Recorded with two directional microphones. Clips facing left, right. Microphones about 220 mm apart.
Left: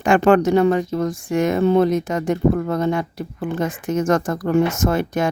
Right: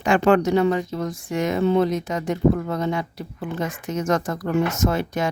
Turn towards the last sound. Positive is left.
turn(degrees=50)  # may be behind; listen again after turning